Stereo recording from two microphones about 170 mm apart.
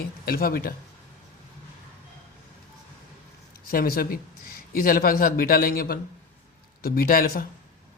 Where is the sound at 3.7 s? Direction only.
60° left (ahead or behind).